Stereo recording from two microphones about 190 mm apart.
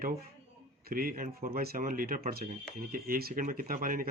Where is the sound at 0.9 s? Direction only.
50° right (ahead or behind).